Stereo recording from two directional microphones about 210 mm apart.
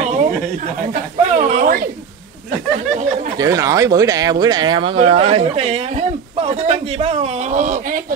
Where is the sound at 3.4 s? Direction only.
15° right (ahead or behind).